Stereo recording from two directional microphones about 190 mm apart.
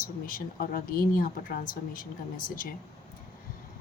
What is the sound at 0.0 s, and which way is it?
Speech, 45° left (ahead or behind).